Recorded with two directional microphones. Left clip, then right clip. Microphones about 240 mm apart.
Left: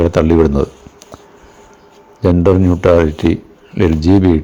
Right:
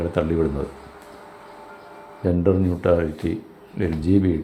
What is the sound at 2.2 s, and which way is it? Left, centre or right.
Speech, left.